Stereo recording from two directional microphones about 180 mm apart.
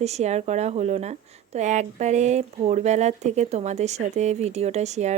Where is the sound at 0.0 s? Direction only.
40° right (ahead or behind).